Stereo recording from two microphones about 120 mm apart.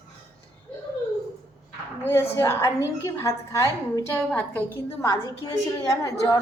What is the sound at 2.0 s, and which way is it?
A woman's voice, 20° left (ahead or behind).